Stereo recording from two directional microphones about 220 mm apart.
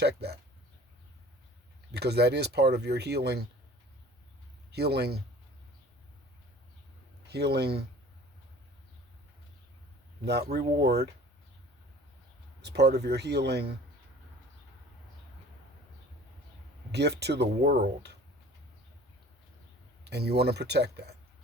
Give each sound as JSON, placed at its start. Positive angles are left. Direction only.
{"t": 0.0, "sound": "speech", "side_deg": -45}
{"t": 1.9, "sound": "speech", "side_deg": -50}
{"t": 4.7, "sound": "speech", "side_deg": -50}
{"t": 7.3, "sound": "speech", "side_deg": -50}
{"t": 10.8, "sound": "speech", "side_deg": -50}
{"t": 12.6, "sound": "speech", "side_deg": -45}
{"t": 16.9, "sound": "speech", "side_deg": -50}
{"t": 20.1, "sound": "speech", "side_deg": -50}